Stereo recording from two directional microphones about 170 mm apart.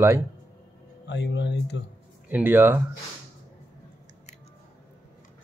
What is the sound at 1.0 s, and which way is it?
Speech, 90° left.